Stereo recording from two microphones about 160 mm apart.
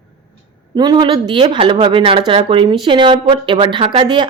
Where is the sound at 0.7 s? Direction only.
25° right (ahead or behind).